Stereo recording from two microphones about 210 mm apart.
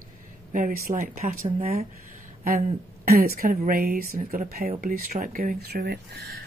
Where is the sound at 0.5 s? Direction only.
40° right (ahead or behind).